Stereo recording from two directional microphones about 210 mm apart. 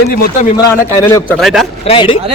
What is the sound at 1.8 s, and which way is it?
Speech, 25° left (ahead or behind).